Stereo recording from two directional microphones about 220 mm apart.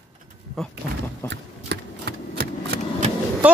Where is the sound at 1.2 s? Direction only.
50° right (ahead or behind).